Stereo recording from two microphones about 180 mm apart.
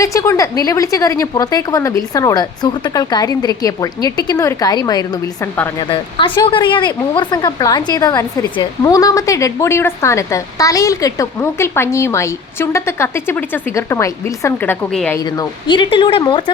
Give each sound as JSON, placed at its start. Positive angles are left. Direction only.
{"t": 0.0, "sound": "a woman's voice", "side_deg": 15}
{"t": 15.2, "sound": "a woman's voice", "side_deg": 20}